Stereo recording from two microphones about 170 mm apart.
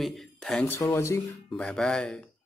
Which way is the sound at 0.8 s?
15° left (ahead or behind).